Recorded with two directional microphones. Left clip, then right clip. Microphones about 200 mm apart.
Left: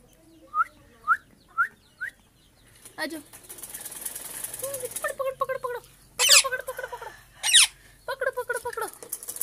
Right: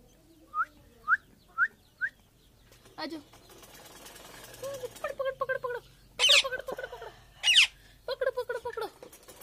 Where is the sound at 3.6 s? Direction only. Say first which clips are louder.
Left 7 dB; 65° left (ahead or behind).